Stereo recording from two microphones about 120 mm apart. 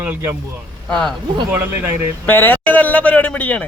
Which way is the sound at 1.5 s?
20° right (ahead or behind).